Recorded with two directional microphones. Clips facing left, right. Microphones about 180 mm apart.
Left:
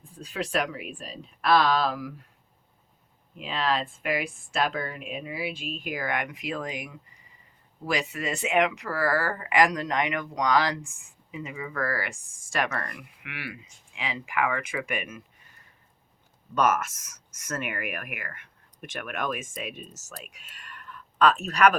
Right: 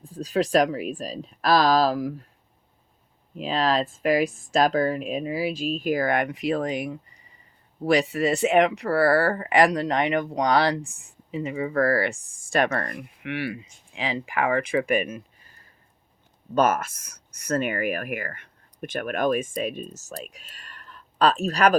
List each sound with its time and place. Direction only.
0.2 s speech: 35° right (ahead or behind)
3.3 s speech: 35° right (ahead or behind)